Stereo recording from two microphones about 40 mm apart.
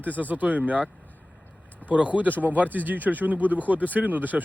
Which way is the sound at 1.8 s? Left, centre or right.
Right.